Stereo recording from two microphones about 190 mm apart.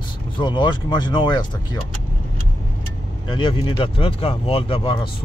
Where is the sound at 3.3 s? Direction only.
25° left (ahead or behind).